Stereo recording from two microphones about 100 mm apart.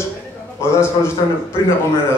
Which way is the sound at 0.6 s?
25° left (ahead or behind).